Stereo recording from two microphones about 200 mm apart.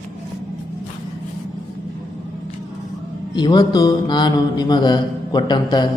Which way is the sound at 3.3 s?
20° left (ahead or behind).